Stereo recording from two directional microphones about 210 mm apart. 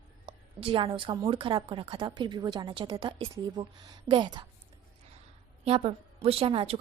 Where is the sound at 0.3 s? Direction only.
25° right (ahead or behind).